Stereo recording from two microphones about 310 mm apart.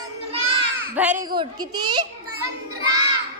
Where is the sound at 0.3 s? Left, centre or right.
Centre.